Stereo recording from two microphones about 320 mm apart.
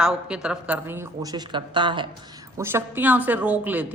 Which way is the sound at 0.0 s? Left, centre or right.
Centre.